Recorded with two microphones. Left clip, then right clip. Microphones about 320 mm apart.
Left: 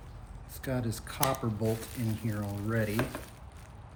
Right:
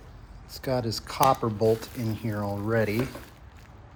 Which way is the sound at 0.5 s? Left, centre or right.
Centre.